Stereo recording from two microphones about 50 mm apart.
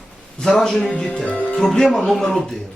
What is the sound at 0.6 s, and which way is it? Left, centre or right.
Speech, centre.